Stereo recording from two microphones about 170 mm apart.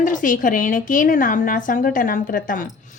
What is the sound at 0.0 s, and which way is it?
A woman's voice, 50° left (ahead or behind).